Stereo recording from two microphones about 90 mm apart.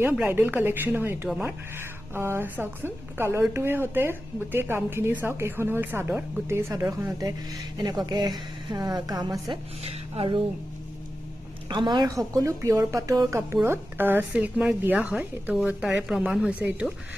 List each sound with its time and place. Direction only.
0.3 s a woman's voice: 25° right (ahead or behind)
6.9 s speech: 40° right (ahead or behind)
9.8 s speech: 90° right
11.7 s a woman's voice: 55° right (ahead or behind)
12.1 s a woman's voice: 40° right (ahead or behind); by 16.9 s 15° right (ahead or behind)